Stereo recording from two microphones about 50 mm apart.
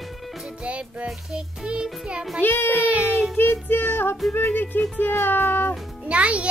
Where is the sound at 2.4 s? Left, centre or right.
Left.